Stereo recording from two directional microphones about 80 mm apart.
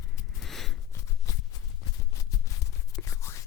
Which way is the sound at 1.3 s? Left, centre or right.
Left.